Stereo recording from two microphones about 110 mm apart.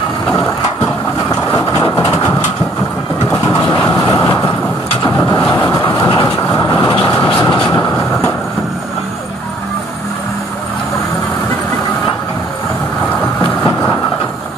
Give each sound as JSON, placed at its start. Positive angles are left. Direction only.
{"t": 1.3, "sound": "vehicle", "side_deg": 30}
{"t": 3.9, "sound": "vehicle", "side_deg": 30}
{"t": 5.6, "sound": "train", "side_deg": 20}
{"t": 5.9, "sound": "train", "side_deg": 35}
{"t": 6.5, "sound": "vehicle", "side_deg": 35}